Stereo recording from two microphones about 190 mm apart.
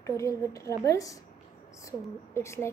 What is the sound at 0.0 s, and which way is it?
A woman's voice, 15° left (ahead or behind).